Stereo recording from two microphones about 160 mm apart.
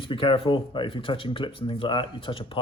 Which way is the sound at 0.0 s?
30° left (ahead or behind).